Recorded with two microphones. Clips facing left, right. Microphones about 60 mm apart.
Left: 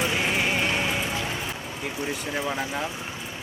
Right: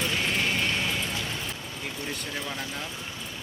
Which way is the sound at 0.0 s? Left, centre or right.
Centre.